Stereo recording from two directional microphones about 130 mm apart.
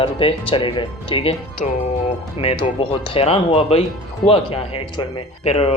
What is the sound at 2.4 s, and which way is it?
A man's voice, 50° left (ahead or behind).